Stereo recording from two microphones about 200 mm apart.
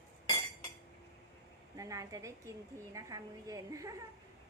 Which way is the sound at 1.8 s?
15° right (ahead or behind).